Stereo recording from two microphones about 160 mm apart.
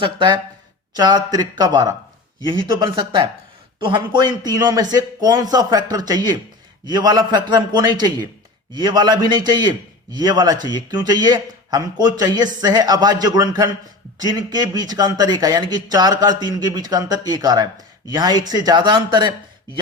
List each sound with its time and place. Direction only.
0.0 s speech: 30° right (ahead or behind)